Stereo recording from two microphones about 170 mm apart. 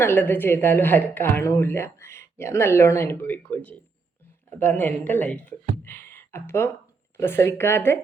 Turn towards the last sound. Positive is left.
turn(degrees=15)  # may be behind; listen again after turning